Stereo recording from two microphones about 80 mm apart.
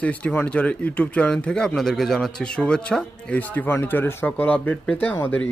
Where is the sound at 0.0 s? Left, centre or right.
Centre.